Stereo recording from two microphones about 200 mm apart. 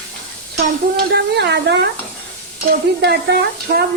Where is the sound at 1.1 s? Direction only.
55° right (ahead or behind).